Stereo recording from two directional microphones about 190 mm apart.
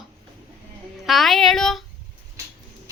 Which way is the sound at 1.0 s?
Centre (ahead or behind).